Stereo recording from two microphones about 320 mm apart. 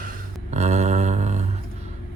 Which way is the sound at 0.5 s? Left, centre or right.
Right.